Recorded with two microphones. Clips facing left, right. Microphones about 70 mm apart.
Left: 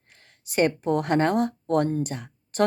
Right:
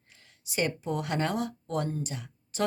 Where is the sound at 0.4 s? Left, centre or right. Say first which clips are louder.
Left 8 dB; left.